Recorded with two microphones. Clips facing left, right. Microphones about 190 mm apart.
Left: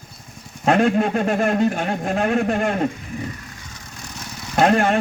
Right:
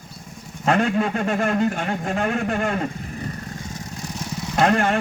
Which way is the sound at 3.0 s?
40° right (ahead or behind).